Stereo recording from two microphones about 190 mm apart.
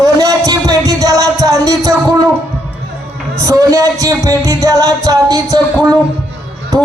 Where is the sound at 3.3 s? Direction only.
15° right (ahead or behind).